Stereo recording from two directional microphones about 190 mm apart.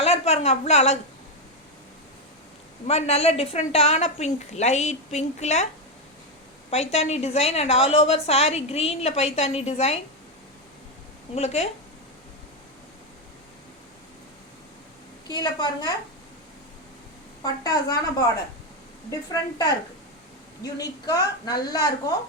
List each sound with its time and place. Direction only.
0.0 s a woman's voice: 35° left (ahead or behind)
2.8 s a woman's voice: 35° left (ahead or behind)
6.7 s a woman's voice: 35° left (ahead or behind)
11.3 s a woman's voice: 35° left (ahead or behind)
15.3 s a woman's voice: 20° left (ahead or behind)
17.4 s a woman's voice: 20° left (ahead or behind)
19.3 s a woman's voice: 20° left (ahead or behind)